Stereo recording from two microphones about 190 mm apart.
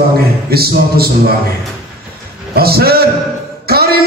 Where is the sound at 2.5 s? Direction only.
55° right (ahead or behind).